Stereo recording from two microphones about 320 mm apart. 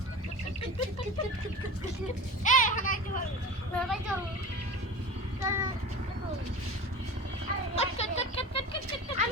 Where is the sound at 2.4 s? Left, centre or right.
Left.